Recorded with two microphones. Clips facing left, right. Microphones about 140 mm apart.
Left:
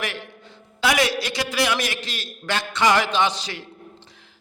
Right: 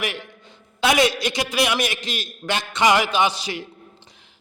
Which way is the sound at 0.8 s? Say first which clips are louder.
Right 2 dB; 20° right (ahead or behind).